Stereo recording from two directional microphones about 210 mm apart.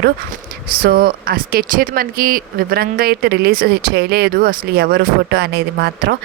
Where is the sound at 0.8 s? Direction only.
45° right (ahead or behind).